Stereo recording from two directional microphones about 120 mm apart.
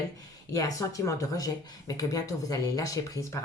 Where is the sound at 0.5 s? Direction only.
30° left (ahead or behind).